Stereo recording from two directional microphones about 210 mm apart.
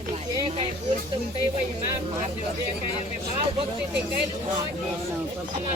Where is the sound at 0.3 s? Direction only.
25° right (ahead or behind).